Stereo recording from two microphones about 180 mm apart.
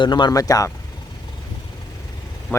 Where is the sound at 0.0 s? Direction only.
25° left (ahead or behind).